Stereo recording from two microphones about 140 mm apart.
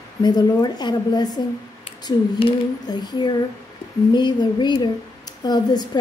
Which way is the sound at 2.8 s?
30° left (ahead or behind).